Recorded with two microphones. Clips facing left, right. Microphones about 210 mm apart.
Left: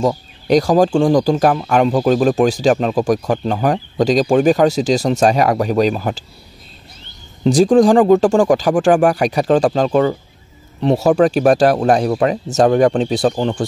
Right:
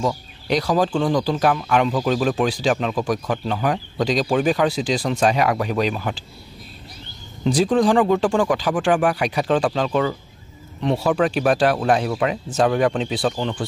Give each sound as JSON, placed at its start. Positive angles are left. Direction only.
{"t": 0.0, "sound": "speech", "side_deg": 45}
{"t": 7.4, "sound": "speech", "side_deg": 45}